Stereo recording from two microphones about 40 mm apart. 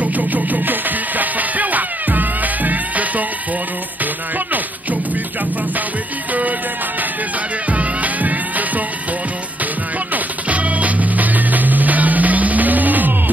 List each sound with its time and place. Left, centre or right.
0.0 s music: right
7.7 s music: right
10.1 s music: right